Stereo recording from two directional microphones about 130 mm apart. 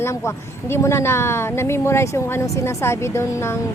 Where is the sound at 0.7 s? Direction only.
20° left (ahead or behind).